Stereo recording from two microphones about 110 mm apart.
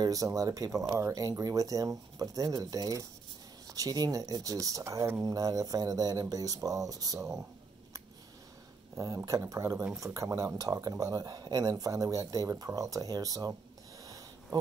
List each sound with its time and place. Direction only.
0.0 s speech: 30° right (ahead or behind)
8.9 s speech: 30° right (ahead or behind)
14.0 s a sound: 30° right (ahead or behind)